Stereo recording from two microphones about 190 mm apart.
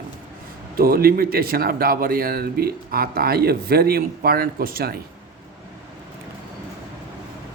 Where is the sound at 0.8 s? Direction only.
50° right (ahead or behind).